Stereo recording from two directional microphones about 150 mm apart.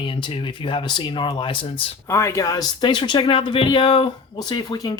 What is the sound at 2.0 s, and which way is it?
Speech, 20° left (ahead or behind).